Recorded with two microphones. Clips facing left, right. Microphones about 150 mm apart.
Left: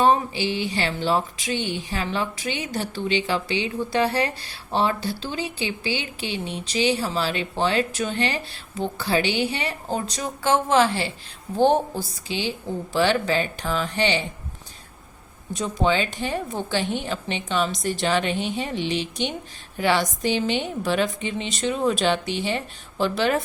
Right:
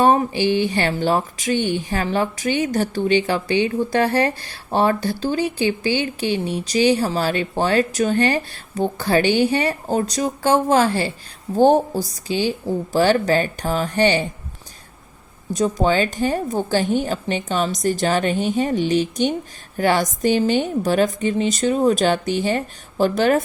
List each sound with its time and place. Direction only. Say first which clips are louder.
0.0 s speech: right 4 dB; 50° right (ahead or behind)
15.5 s speech: right 4 dB; 40° right (ahead or behind)